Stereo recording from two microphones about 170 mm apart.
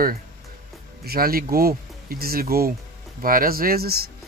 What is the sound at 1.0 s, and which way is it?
Speech, 60° right (ahead or behind).